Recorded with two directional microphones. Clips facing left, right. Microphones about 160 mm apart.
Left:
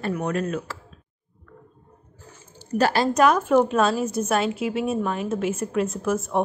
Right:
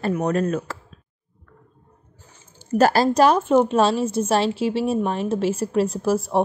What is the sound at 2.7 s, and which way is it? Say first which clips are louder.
A woman's voice: right 4 dB; 40° right (ahead or behind).